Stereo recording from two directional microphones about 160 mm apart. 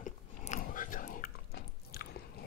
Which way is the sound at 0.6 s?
55° left (ahead or behind).